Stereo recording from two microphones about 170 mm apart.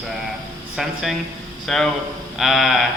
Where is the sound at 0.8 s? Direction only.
5° right (ahead or behind).